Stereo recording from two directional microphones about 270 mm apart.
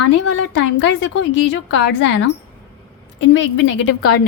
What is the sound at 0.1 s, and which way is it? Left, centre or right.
Speech, left.